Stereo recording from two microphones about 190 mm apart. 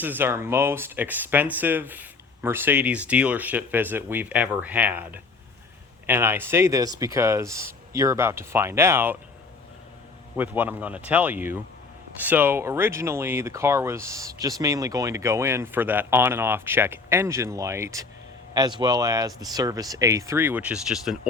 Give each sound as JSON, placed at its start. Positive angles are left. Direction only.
{"t": 0.0, "sound": "speech", "side_deg": -10}
{"t": 10.3, "sound": "speech", "side_deg": -10}